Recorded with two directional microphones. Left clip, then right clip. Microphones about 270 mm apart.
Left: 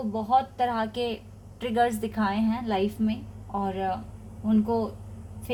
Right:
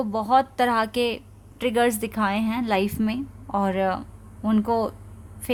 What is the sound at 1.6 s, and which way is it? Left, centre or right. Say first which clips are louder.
Speech: right 3 dB; right.